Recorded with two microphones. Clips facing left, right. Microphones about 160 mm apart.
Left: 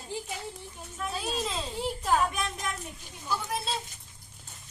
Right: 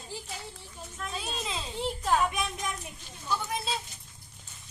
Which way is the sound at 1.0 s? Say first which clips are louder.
Left 4 dB; 5° left (ahead or behind).